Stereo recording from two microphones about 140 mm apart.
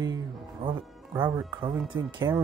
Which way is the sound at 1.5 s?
35° right (ahead or behind).